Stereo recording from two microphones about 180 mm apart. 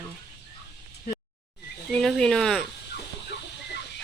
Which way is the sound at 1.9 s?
Centre (ahead or behind).